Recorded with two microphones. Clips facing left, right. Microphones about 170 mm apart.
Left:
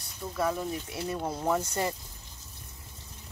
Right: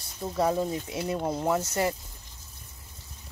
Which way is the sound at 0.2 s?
25° right (ahead or behind).